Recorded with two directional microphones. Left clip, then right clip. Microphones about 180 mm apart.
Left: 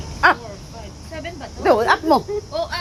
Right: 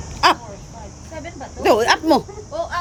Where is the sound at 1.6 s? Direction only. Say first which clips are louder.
Even; 20° right (ahead or behind).